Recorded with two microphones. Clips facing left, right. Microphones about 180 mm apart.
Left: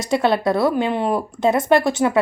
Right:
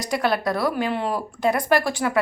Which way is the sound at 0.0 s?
25° left (ahead or behind).